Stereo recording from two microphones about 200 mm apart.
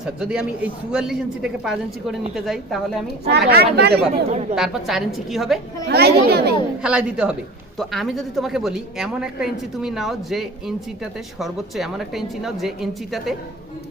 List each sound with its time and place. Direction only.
0.0 s a woman's voice: 5° right (ahead or behind)
3.2 s speech: 55° right (ahead or behind)
4.1 s speech: 35° right (ahead or behind)
4.5 s a woman's voice: centre (ahead or behind)
5.9 s speech: 55° right (ahead or behind)
6.8 s a woman's voice: 5° right (ahead or behind)